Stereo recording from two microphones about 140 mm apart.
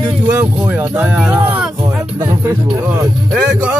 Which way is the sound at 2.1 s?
20° right (ahead or behind).